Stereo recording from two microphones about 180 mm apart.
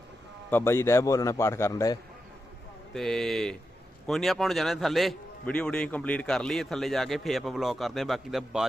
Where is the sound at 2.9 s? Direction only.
Centre (ahead or behind).